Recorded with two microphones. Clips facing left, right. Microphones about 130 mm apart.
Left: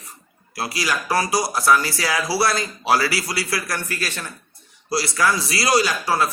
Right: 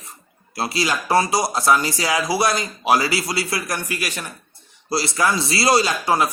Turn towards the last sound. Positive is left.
turn(degrees=-20)  # may be behind; listen again after turning